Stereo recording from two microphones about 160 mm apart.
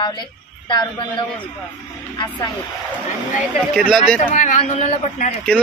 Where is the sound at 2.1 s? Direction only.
25° left (ahead or behind).